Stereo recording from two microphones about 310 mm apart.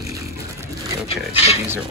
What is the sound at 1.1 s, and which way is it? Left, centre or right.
Speech, centre.